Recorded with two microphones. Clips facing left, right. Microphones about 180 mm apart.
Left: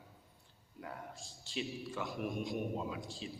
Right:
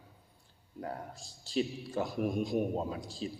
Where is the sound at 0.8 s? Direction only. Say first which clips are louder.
Right 6 dB; 35° right (ahead or behind).